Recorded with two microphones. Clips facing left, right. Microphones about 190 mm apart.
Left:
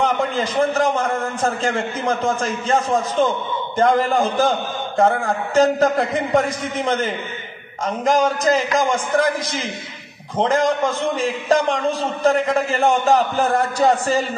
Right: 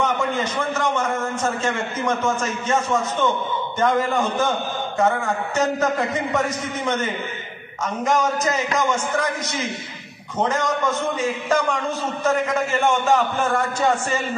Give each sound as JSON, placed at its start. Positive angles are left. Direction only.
{"t": 0.0, "sound": "a man's voice", "side_deg": 35}